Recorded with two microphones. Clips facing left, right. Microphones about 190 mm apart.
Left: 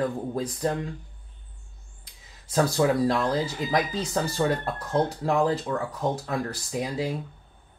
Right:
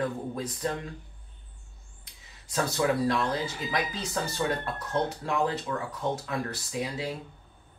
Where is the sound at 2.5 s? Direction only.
35° left (ahead or behind).